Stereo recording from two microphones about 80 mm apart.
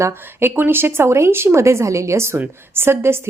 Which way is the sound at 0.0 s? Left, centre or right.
Right.